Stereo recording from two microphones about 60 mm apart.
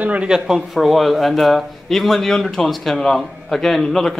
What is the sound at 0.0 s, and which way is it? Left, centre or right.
Speech, right.